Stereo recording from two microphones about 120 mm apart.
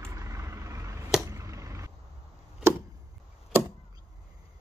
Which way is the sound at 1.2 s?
25° right (ahead or behind).